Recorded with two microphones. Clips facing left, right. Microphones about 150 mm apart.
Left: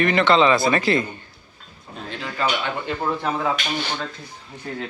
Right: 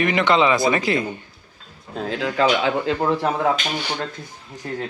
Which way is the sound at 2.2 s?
90° right.